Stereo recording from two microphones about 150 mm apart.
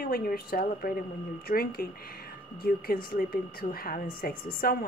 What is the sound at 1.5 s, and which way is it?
Speech, 85° left.